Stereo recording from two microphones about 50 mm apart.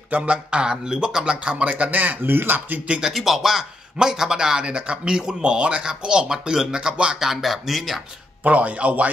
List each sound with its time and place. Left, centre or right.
0.2 s speech: right
3.1 s a man's voice: centre
7.2 s speech: centre
8.5 s speech: right